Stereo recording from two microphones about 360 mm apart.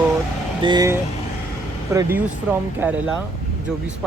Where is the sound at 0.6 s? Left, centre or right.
Centre.